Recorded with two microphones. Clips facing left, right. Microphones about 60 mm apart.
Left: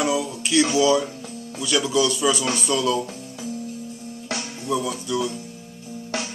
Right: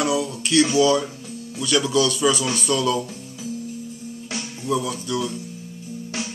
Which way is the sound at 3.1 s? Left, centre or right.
Left.